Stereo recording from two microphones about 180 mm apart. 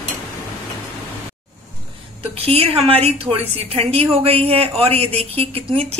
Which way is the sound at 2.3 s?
35° right (ahead or behind).